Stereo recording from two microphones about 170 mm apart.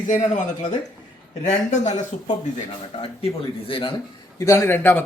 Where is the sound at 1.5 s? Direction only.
40° left (ahead or behind).